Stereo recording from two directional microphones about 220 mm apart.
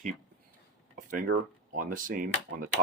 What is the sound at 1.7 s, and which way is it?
Speech, 40° right (ahead or behind).